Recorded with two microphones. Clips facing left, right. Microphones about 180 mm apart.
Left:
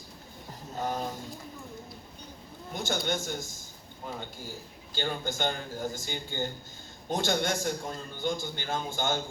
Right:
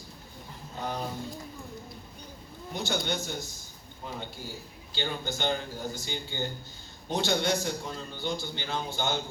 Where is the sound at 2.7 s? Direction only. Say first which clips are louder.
Even; 45° left (ahead or behind).